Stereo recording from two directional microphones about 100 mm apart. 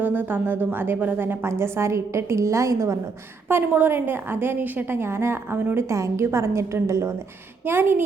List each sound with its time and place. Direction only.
0.0 s a woman's voice: 20° right (ahead or behind)
3.5 s a woman's voice: 20° right (ahead or behind)